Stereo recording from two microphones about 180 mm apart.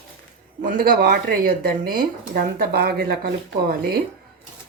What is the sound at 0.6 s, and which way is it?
Speech, 50° right (ahead or behind).